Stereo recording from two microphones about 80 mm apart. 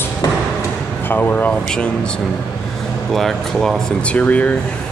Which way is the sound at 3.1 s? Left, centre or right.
Centre.